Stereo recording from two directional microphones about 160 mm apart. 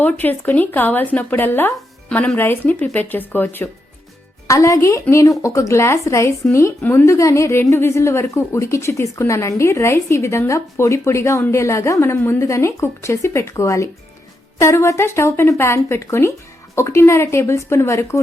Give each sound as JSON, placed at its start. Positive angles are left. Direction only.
{"t": 0.0, "sound": "a woman's voice", "side_deg": 10}